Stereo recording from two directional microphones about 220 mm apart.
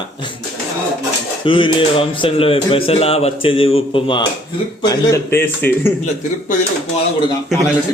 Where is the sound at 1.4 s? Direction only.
25° left (ahead or behind).